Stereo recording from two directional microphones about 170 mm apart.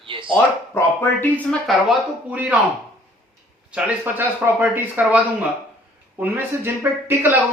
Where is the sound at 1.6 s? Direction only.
5° right (ahead or behind).